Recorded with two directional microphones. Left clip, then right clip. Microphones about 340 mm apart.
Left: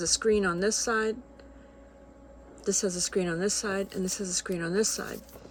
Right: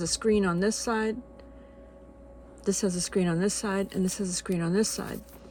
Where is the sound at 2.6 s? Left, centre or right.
Right.